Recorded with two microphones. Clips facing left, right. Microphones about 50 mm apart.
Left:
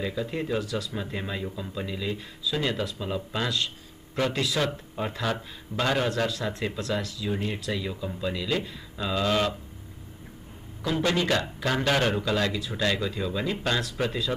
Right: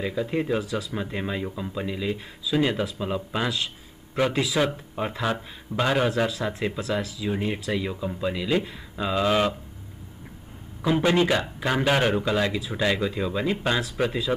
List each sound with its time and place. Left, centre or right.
0.0 s speech: centre
10.8 s speech: centre